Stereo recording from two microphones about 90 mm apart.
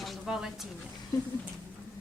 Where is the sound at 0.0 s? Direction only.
5° right (ahead or behind).